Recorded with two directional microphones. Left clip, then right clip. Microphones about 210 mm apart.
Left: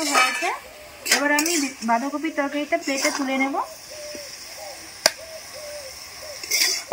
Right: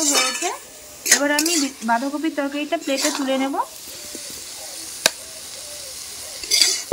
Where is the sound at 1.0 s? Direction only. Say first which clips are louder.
Right 2 dB; 15° right (ahead or behind).